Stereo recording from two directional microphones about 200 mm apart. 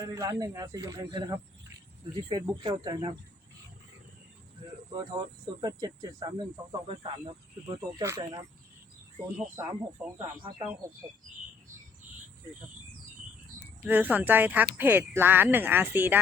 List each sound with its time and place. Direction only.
0.0 s speech: 15° right (ahead or behind)
4.9 s speech: 20° right (ahead or behind)
13.8 s speech: 10° right (ahead or behind)